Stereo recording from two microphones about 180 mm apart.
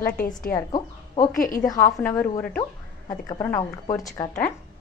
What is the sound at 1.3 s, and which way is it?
Speech, 50° left (ahead or behind).